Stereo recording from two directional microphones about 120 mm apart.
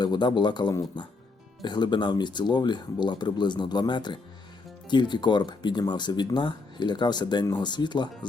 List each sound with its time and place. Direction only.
0.0 s speech: 35° left (ahead or behind)